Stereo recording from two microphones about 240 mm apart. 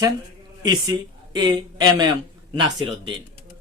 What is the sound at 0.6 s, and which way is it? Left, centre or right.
A man's voice, centre.